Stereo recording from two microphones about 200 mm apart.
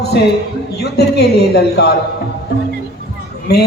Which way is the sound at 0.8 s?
55° left (ahead or behind).